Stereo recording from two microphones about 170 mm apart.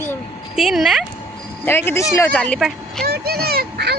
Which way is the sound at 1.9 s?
15° left (ahead or behind).